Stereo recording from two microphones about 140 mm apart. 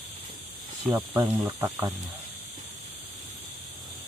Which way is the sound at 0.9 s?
20° right (ahead or behind).